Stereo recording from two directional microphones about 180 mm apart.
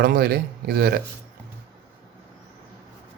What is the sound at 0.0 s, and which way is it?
Speech, 55° right (ahead or behind).